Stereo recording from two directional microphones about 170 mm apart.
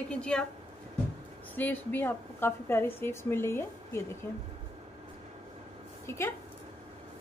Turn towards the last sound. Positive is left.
turn(degrees=15)  # may be behind; listen again after turning